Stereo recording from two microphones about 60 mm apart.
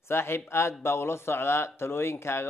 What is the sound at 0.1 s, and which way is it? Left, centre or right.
Speech, left.